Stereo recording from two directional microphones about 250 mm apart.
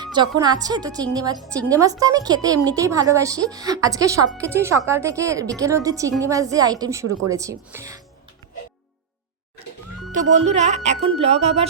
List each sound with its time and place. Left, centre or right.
0.0 s a woman's voice: centre
1.4 s speech: centre
1.7 s a woman's voice: centre
10.1 s speech: right